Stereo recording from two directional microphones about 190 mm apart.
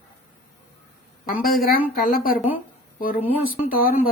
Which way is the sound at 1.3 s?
50° left (ahead or behind).